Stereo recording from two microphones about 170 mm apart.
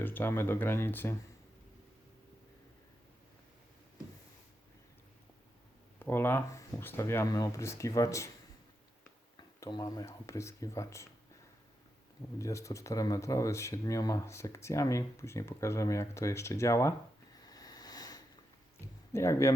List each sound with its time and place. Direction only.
0.0 s speech: 10° left (ahead or behind)
6.0 s speech: 15° left (ahead or behind)
9.6 s speech: 25° left (ahead or behind)
12.4 s speech: 20° left (ahead or behind)
17.4 s a sound: 20° left (ahead or behind)
19.1 s speech: 15° left (ahead or behind)